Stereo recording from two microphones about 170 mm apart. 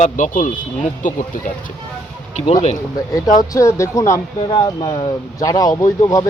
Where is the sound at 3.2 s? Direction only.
20° left (ahead or behind).